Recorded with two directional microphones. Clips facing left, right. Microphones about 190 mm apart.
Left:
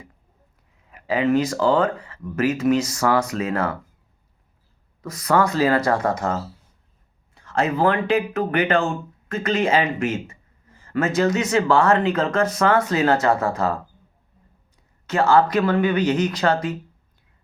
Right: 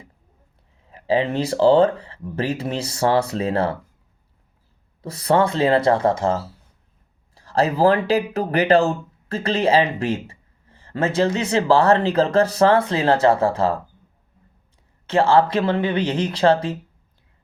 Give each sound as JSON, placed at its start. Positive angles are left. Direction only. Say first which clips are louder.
{"t": 0.9, "sound": "speech", "louder": "even", "side_deg": -30}
{"t": 5.0, "sound": "speech", "louder": "right 2 dB", "side_deg": -30}
{"t": 15.0, "sound": "speech", "louder": "right 1 dB", "side_deg": -30}